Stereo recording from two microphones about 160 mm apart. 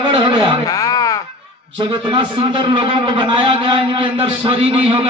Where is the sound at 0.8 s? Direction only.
20° left (ahead or behind).